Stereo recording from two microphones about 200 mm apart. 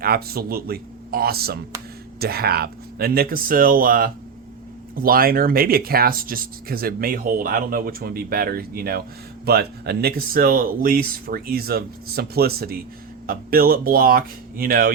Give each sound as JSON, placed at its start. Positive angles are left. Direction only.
{"t": 0.0, "sound": "speech", "side_deg": -50}